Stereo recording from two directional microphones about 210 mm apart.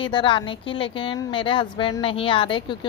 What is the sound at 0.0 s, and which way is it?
A woman's voice, 25° left (ahead or behind).